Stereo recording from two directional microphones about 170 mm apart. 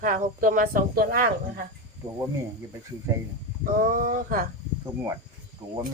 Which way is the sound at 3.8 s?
55° right (ahead or behind).